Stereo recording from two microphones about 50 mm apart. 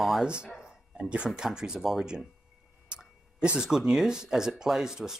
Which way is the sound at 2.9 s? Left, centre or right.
Centre.